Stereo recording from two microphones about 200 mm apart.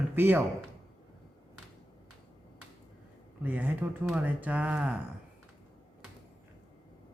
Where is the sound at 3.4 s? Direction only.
10° right (ahead or behind).